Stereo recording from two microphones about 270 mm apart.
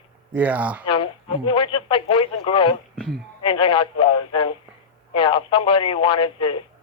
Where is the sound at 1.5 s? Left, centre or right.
Centre.